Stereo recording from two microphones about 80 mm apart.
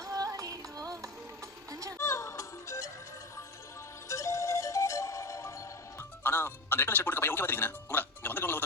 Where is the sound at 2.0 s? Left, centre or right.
Left.